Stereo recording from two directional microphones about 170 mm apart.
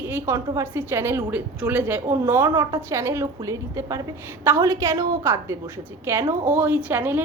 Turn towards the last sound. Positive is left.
turn(degrees=-10)  # may be behind; listen again after turning